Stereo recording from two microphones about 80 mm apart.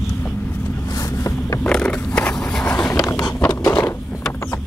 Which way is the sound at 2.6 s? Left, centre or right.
Left.